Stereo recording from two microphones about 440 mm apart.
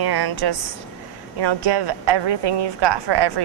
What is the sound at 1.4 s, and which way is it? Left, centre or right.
Speech, right.